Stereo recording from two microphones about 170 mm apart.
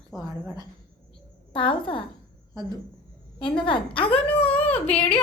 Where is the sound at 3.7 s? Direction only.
30° left (ahead or behind).